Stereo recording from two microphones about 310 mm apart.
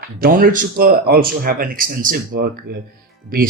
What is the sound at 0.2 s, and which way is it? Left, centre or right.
Speech, right.